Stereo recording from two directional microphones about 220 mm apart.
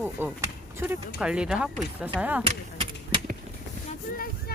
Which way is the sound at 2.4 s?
25° right (ahead or behind).